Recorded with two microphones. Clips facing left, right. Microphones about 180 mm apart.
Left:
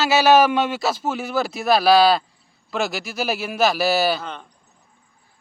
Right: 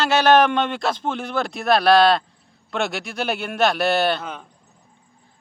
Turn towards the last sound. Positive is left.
turn(degrees=5)  # may be behind; listen again after turning